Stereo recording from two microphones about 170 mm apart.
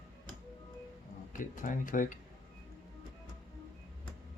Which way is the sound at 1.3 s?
50° left (ahead or behind).